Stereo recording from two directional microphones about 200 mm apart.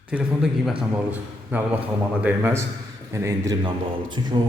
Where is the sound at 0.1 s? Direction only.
5° right (ahead or behind).